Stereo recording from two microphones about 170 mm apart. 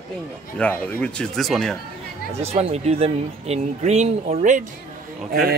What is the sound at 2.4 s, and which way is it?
Speech, 40° right (ahead or behind).